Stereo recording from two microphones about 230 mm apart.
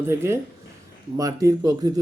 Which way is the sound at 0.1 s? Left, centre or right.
Centre.